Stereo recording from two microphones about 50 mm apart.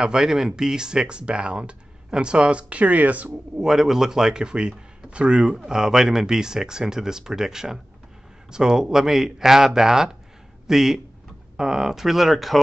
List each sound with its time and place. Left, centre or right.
0.0 s speech: centre; by 3.3 s right
3.5 s speech: centre